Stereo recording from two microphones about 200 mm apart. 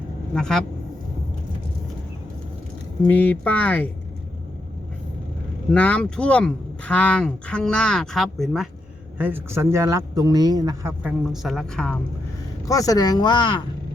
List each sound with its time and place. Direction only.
0.3 s speech: 5° left (ahead or behind)
3.1 s speech: 10° left (ahead or behind)
5.7 s speech: 5° left (ahead or behind)
12.6 s speech: 15° left (ahead or behind)